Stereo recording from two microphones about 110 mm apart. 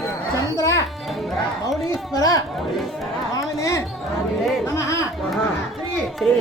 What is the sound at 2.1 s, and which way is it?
Chatter, 35° left (ahead or behind).